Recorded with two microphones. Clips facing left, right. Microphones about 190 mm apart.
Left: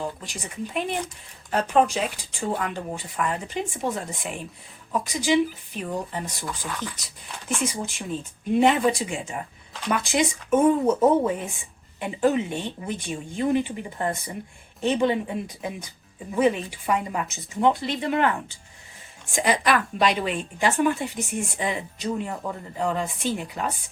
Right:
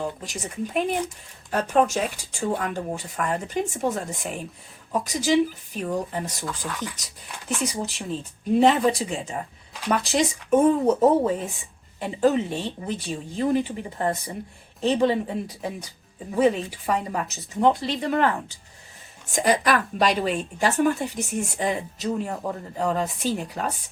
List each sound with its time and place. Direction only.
0.2 s a woman's voice: 45° right (ahead or behind)